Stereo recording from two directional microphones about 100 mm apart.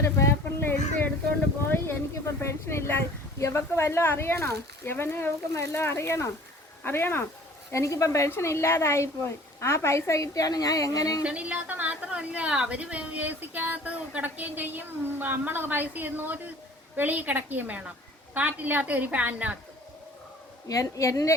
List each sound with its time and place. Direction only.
0.0 s a sound: 25° left (ahead or behind)
1.6 s a woman's voice: 25° left (ahead or behind)
11.2 s a woman's voice: 10° right (ahead or behind)
20.7 s a woman's voice: 35° left (ahead or behind)